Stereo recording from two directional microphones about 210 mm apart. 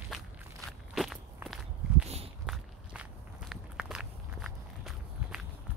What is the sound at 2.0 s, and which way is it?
Walk, 30° right (ahead or behind).